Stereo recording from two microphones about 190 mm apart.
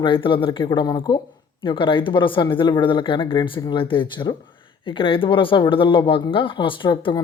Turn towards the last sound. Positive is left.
turn(degrees=25)  # may be behind; listen again after turning